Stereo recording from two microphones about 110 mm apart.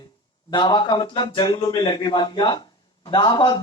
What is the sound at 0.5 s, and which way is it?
Speech, 45° left (ahead or behind).